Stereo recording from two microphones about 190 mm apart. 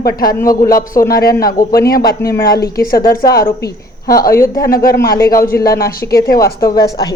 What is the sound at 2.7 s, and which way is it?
Speech, 50° left (ahead or behind).